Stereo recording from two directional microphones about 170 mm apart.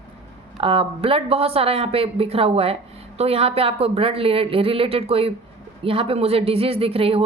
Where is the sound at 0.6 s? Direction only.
35° right (ahead or behind).